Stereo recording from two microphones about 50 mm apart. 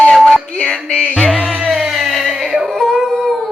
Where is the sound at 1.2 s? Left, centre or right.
Centre.